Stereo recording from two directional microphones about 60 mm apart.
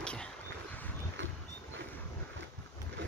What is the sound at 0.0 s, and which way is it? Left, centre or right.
Vehicle, centre.